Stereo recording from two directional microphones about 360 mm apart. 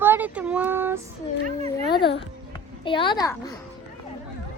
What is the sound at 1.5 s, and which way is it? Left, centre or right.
Cat, centre.